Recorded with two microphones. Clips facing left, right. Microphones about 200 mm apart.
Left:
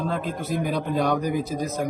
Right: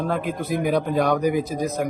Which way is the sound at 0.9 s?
50° right (ahead or behind).